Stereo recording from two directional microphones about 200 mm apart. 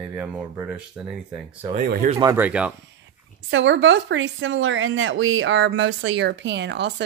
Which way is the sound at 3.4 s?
65° right (ahead or behind).